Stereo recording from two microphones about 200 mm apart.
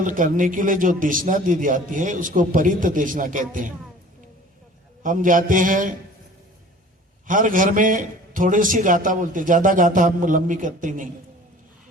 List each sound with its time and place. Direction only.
0.0 s a man's voice: 40° right (ahead or behind)
5.0 s a man's voice: 40° right (ahead or behind)
7.3 s a man's voice: 40° right (ahead or behind)